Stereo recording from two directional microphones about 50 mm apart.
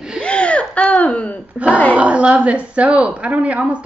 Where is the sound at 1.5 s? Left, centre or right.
Right.